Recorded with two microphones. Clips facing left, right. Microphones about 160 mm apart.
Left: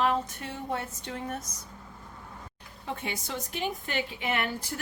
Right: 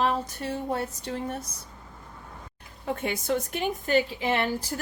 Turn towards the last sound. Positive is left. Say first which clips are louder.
# right 4 dB
turn(degrees=-35)  # may be behind; listen again after turning